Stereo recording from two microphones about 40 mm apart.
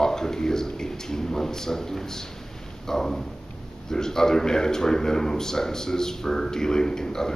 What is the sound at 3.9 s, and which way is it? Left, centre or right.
Speech, centre.